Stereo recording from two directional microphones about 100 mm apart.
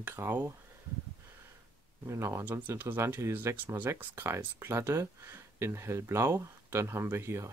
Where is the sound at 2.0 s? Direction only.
25° right (ahead or behind).